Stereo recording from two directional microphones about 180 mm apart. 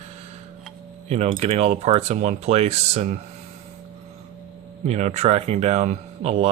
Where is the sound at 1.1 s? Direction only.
35° right (ahead or behind).